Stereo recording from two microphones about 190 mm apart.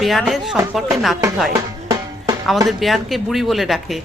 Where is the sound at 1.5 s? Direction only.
20° right (ahead or behind).